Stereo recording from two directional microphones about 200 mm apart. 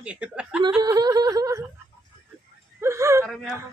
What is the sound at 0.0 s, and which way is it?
Speech, 5° right (ahead or behind).